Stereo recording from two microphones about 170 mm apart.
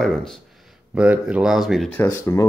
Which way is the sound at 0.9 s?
5° right (ahead or behind).